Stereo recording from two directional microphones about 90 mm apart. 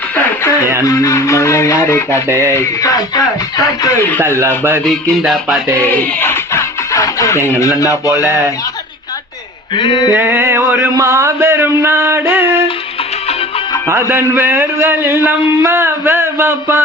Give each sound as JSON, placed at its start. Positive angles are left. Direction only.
{"t": 0.9, "sound": "music", "side_deg": 35}
{"t": 2.2, "sound": "music", "side_deg": -30}
{"t": 2.6, "sound": "music", "side_deg": 40}
{"t": 4.9, "sound": "music", "side_deg": 0}
{"t": 5.8, "sound": "speech", "side_deg": 20}
{"t": 9.7, "sound": "a sound", "side_deg": 60}
{"t": 10.2, "sound": "music", "side_deg": -25}
{"t": 13.8, "sound": "music", "side_deg": -25}
{"t": 15.6, "sound": "speech", "side_deg": -25}